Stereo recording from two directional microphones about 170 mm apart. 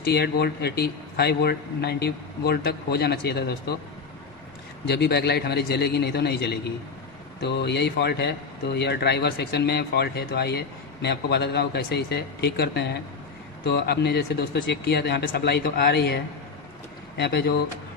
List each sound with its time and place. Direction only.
0.0 s a man's voice: 75° left (ahead or behind)
4.9 s a man's voice: 75° left (ahead or behind)